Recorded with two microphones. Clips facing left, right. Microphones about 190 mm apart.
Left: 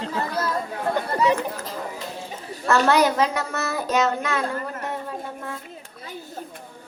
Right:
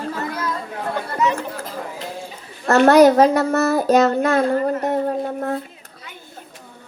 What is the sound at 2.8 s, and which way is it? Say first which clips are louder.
Speech: right 11 dB; 40° right (ahead or behind).